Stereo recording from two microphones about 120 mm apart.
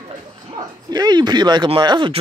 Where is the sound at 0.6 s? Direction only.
35° right (ahead or behind).